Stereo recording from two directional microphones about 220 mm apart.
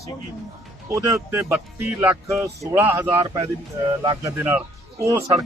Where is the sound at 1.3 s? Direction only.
10° right (ahead or behind).